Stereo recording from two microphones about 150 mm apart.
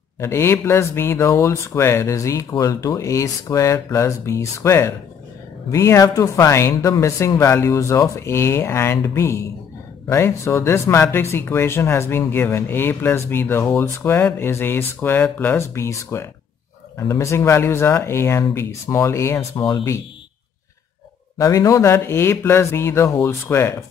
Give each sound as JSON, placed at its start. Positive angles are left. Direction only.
{"t": 0.2, "sound": "speech", "side_deg": 15}
{"t": 21.4, "sound": "speech", "side_deg": 20}